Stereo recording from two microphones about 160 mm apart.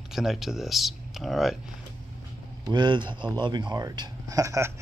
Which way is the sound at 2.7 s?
30° right (ahead or behind).